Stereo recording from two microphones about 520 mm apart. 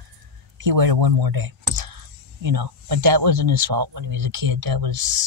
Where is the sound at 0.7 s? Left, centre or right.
Right.